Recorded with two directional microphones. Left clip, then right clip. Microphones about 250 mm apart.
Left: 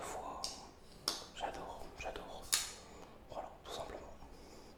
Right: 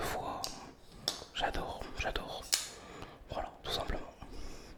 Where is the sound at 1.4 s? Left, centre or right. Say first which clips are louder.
Right 7 dB; right.